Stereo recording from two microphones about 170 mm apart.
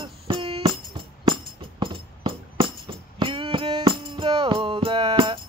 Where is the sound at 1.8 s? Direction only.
30° right (ahead or behind).